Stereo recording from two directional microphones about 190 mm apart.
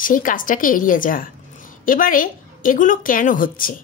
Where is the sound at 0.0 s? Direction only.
45° left (ahead or behind).